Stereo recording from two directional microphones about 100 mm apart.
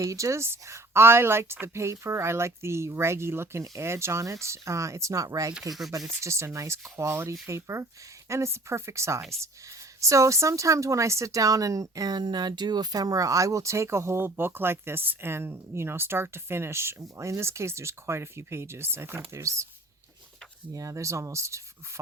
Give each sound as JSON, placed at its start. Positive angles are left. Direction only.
{"t": 0.0, "sound": "speech", "side_deg": -30}
{"t": 20.7, "sound": "speech", "side_deg": -30}